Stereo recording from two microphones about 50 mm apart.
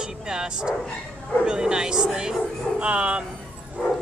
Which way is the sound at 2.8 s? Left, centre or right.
Right.